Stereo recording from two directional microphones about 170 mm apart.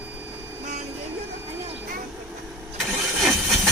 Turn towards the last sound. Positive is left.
turn(degrees=0)  # may be behind; listen again after turning